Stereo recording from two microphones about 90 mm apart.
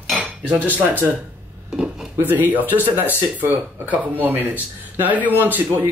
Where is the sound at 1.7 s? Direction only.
5° right (ahead or behind).